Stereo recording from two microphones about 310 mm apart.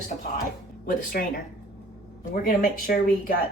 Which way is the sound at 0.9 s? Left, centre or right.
Left.